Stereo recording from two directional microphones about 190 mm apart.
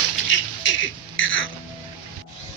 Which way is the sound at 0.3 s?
75° left (ahead or behind).